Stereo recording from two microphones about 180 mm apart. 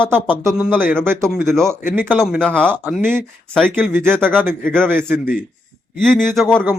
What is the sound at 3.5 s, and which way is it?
Speech, 5° left (ahead or behind).